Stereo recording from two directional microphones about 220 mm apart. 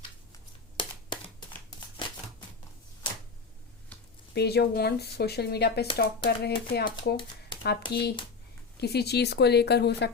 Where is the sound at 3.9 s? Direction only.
5° left (ahead or behind).